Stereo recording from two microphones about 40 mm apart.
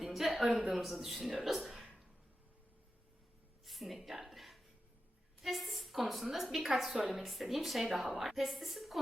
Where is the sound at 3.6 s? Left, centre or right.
Centre.